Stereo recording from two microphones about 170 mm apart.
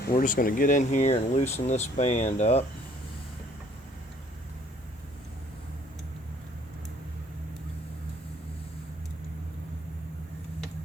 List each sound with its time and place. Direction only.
0.0 s speech: 55° left (ahead or behind); by 2.6 s 40° left (ahead or behind)